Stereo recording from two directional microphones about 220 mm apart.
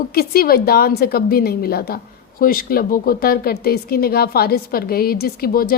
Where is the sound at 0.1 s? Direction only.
45° left (ahead or behind).